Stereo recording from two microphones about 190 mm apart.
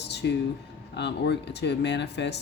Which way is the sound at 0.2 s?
65° left (ahead or behind).